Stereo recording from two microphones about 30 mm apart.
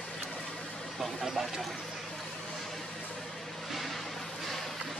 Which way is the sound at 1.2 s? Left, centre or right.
Centre.